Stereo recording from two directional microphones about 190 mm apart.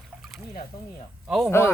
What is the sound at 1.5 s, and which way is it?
Speech, 15° left (ahead or behind).